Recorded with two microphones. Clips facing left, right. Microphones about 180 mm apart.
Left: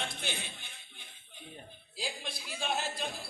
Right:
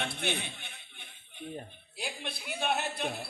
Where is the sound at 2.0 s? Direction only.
60° right (ahead or behind).